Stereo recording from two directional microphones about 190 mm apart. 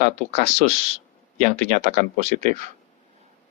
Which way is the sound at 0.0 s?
35° right (ahead or behind).